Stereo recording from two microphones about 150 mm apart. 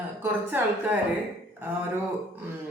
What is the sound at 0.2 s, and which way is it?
Speech, 15° right (ahead or behind).